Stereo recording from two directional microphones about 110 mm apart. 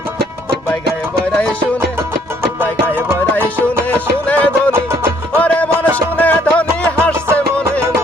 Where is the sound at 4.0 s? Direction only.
15° left (ahead or behind).